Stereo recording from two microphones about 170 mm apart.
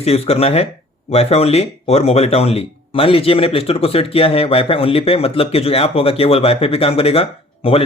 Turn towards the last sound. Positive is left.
turn(degrees=35)  # may be behind; listen again after turning